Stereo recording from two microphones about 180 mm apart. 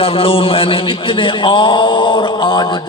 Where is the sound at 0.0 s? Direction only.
30° left (ahead or behind).